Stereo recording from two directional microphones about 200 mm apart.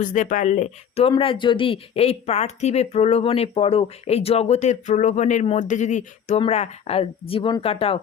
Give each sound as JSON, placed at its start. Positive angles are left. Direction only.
{"t": 0.0, "sound": "a woman's voice", "side_deg": 40}